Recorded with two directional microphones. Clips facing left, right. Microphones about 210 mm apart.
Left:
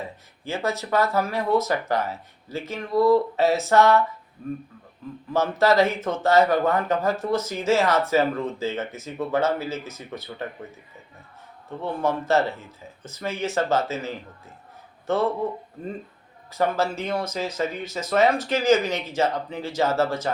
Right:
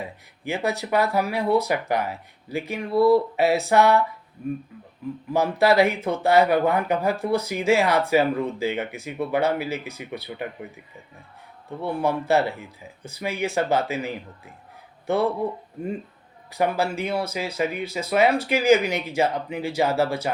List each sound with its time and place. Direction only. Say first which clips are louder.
0.0 s speech: right 2 dB; 15° right (ahead or behind)
11.8 s speech: right 1 dB; 10° right (ahead or behind)